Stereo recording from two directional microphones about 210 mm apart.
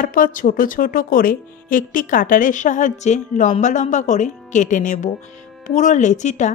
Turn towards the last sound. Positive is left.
turn(degrees=35)  # may be behind; listen again after turning